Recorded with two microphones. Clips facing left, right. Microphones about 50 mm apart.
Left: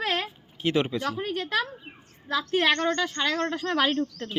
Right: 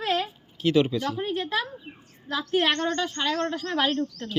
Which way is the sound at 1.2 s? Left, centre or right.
Left.